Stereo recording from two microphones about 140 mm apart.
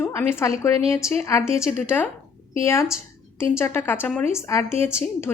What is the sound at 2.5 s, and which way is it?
A woman's voice, 20° left (ahead or behind).